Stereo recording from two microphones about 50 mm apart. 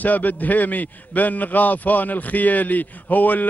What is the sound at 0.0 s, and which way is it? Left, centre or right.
A man's voice, left.